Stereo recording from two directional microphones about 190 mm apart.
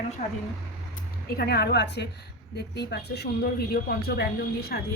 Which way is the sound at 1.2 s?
55° left (ahead or behind).